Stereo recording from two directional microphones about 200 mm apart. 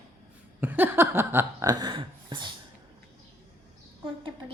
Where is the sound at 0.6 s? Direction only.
10° right (ahead or behind).